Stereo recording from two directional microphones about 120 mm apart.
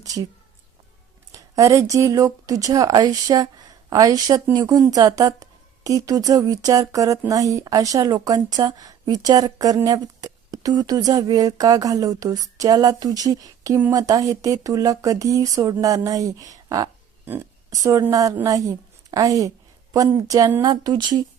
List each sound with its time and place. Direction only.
0.0 s speech: 30° right (ahead or behind)
1.3 s a woman's voice: 25° right (ahead or behind)
17.2 s speech: 15° right (ahead or behind)
17.7 s a woman's voice: 30° right (ahead or behind)